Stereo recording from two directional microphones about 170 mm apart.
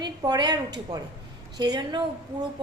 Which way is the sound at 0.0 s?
25° right (ahead or behind).